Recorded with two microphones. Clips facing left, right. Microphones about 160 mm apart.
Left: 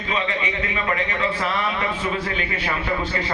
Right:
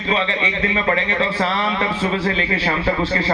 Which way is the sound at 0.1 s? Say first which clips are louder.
Right 4 dB; 30° right (ahead or behind).